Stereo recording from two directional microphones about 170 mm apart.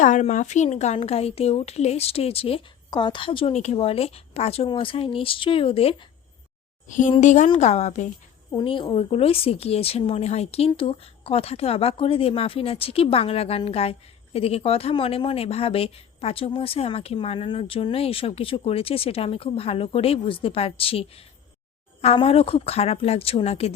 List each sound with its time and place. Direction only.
0.0 s speech: 45° left (ahead or behind)
6.8 s a woman's voice: 50° left (ahead or behind)
8.4 s speech: 25° left (ahead or behind)